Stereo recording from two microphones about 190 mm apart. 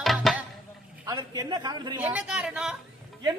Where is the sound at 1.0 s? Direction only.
20° right (ahead or behind).